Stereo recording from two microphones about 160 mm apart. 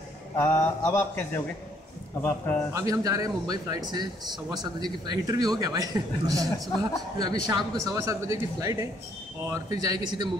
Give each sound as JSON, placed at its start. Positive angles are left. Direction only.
{"t": 0.4, "sound": "speech", "side_deg": 15}
{"t": 2.7, "sound": "speech", "side_deg": -20}